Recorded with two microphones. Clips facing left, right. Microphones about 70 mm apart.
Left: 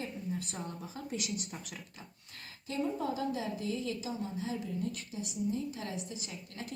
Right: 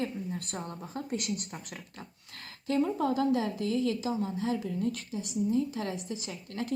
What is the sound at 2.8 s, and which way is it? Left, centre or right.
Speech, right.